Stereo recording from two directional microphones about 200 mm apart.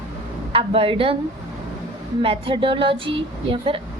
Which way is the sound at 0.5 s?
25° right (ahead or behind).